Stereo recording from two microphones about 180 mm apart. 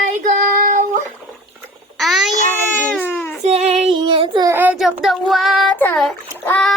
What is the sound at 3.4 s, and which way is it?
Child singing, 40° right (ahead or behind).